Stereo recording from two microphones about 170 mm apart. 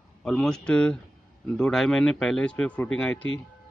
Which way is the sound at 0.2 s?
5° left (ahead or behind).